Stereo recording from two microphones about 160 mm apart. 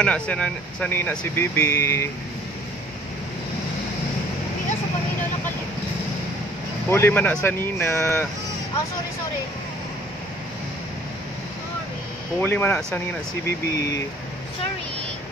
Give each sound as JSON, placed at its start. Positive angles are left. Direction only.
{"t": 0.0, "sound": "speech", "side_deg": 5}
{"t": 6.9, "sound": "speech", "side_deg": 15}
{"t": 12.4, "sound": "speech", "side_deg": 10}